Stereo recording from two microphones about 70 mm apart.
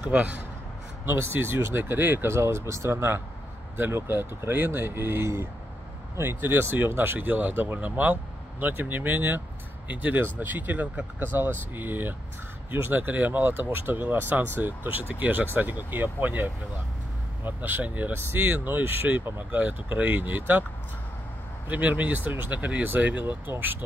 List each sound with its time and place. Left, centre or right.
0.1 s speech: centre
1.0 s speech: right
17.5 s speech: right
21.6 s speech: right